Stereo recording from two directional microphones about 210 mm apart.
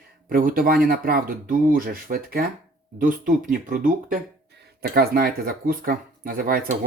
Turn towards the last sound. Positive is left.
turn(degrees=-45)  # may be behind; listen again after turning